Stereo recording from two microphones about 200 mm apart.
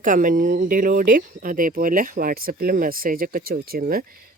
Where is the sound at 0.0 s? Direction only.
40° right (ahead or behind).